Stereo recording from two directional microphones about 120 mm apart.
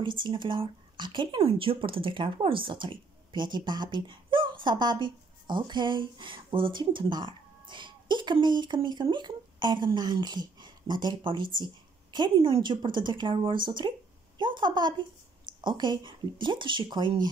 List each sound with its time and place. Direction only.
0.0 s a woman's voice: 40° right (ahead or behind)